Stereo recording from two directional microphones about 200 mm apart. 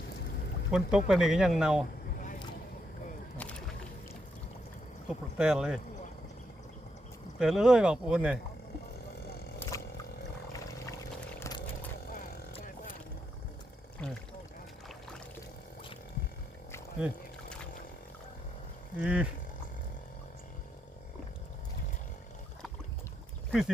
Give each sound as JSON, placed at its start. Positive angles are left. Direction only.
{"t": 0.7, "sound": "speech", "side_deg": -5}
{"t": 5.0, "sound": "speech", "side_deg": -5}
{"t": 7.3, "sound": "speech", "side_deg": 0}
{"t": 9.6, "sound": "a sound", "side_deg": 15}
{"t": 11.2, "sound": "pour", "side_deg": 15}
{"t": 12.6, "sound": "vehicle", "side_deg": 40}
{"t": 14.0, "sound": "speech", "side_deg": 5}
{"t": 18.9, "sound": "wild animals", "side_deg": -5}
{"t": 23.5, "sound": "speech", "side_deg": 0}